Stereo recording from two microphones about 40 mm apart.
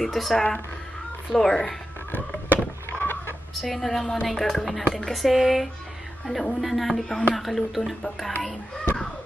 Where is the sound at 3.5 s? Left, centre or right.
Centre.